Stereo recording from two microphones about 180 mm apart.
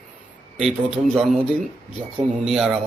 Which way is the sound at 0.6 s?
5° right (ahead or behind).